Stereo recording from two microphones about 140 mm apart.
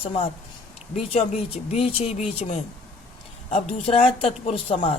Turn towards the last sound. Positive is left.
turn(degrees=40)  # may be behind; listen again after turning